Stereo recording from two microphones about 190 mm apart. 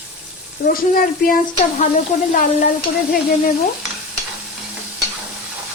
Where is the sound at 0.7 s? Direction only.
50° left (ahead or behind).